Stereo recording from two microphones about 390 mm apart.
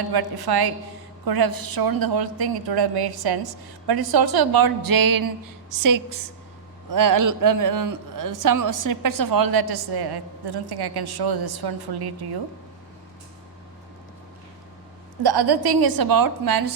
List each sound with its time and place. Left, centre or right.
0.1 s a woman's voice: right
15.2 s a man's voice: right